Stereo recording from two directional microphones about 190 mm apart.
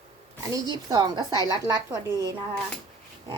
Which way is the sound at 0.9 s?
20° right (ahead or behind).